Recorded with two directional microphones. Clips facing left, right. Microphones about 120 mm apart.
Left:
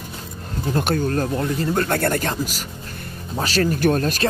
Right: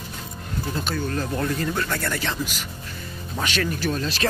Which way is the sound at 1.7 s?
50° left (ahead or behind).